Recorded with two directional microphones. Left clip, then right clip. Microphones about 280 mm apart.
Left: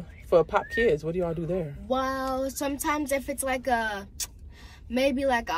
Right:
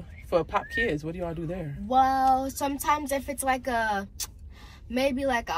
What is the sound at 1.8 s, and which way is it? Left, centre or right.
A woman's voice, centre.